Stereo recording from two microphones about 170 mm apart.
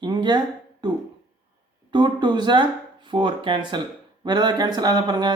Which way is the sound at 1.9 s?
25° right (ahead or behind).